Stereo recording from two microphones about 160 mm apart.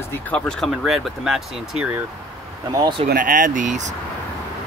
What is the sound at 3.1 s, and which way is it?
Speech, 60° right (ahead or behind).